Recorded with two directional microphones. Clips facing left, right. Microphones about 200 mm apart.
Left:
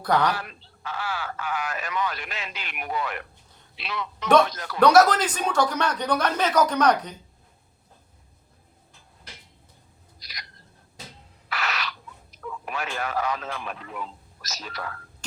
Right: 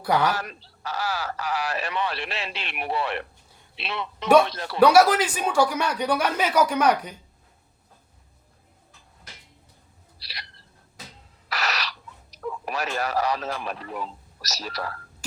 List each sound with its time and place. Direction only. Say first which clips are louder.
0.0 s speech: even; 10° right (ahead or behind)
0.3 s a man's voice: right 3 dB; 40° right (ahead or behind)
4.8 s speech: right 1 dB; 10° right (ahead or behind)
10.2 s a sound: right 2 dB; 30° right (ahead or behind)
11.4 s owl: right 1 dB; 40° right (ahead or behind)
12.4 s speech: right 3 dB; 40° right (ahead or behind)